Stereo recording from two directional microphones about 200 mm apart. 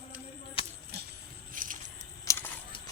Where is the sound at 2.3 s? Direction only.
15° left (ahead or behind).